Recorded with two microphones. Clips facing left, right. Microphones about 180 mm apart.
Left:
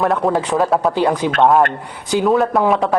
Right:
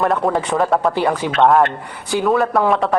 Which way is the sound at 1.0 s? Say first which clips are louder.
Left 2 dB; 15° left (ahead or behind).